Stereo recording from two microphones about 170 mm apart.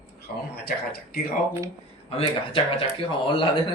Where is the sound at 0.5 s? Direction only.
65° left (ahead or behind).